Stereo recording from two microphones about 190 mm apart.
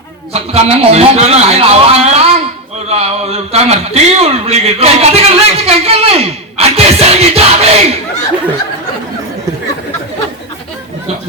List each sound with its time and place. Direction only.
0.3 s a man's voice: 35° right (ahead or behind)